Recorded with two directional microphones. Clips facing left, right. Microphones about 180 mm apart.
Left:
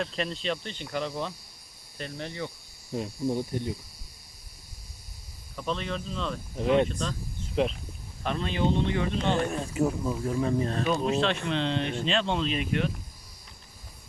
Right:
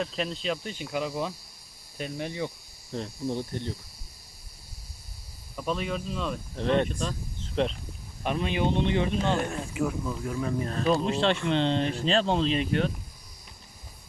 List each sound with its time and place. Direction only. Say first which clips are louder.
0.0 s speech: even; centre (ahead or behind)
2.9 s speech: left 2 dB; 10° left (ahead or behind)
5.5 s speech: right 2 dB; 10° right (ahead or behind)
6.6 s speech: left 2 dB; 10° left (ahead or behind)
8.2 s speech: right 1 dB; 15° right (ahead or behind)
9.7 s speech: left 3 dB; 35° left (ahead or behind)
10.8 s speech: right 4 dB; 30° right (ahead or behind)